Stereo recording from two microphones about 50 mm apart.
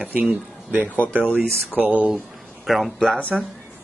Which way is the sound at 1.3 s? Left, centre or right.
Right.